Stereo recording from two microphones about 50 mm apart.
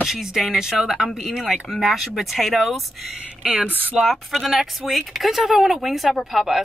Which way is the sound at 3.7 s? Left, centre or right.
Right.